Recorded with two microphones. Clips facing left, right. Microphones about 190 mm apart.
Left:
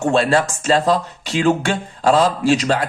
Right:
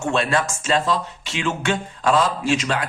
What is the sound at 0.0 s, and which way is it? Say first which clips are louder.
Speech: left 5 dB; 35° left (ahead or behind).